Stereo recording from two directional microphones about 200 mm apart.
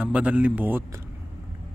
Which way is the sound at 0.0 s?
5° right (ahead or behind).